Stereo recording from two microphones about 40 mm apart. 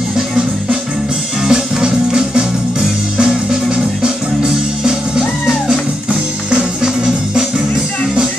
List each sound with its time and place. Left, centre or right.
1.5 s music: centre
6.8 s music: centre